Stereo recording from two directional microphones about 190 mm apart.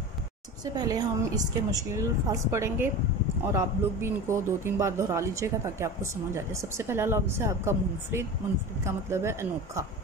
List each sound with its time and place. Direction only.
0.7 s speech: 20° right (ahead or behind)